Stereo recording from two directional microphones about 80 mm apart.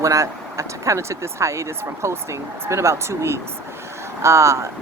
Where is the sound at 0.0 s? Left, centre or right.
Right.